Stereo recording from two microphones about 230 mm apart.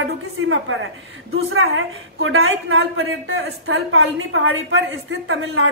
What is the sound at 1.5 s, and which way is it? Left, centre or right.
Speech, right.